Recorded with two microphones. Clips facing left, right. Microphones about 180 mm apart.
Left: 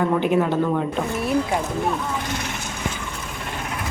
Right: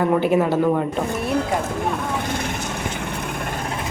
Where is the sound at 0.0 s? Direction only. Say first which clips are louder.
Right 2 dB; 5° right (ahead or behind).